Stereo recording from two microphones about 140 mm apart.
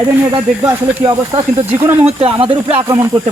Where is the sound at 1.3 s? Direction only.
40° right (ahead or behind).